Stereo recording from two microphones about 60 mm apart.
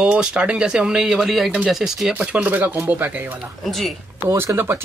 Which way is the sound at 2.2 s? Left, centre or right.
Right.